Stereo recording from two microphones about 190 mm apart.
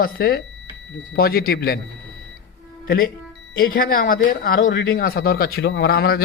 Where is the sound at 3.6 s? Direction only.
50° left (ahead or behind).